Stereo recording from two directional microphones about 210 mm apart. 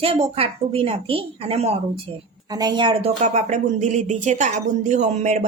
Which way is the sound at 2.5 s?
20° right (ahead or behind).